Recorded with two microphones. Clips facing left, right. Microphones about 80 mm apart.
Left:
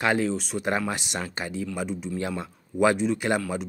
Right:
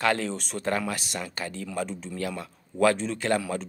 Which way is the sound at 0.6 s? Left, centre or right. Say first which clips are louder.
Right 1 dB; centre.